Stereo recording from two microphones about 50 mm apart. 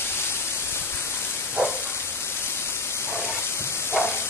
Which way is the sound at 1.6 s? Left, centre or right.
Right.